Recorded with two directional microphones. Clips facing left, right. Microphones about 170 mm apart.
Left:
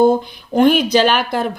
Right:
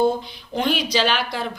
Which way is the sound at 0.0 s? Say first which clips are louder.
Left 7 dB; 50° left (ahead or behind).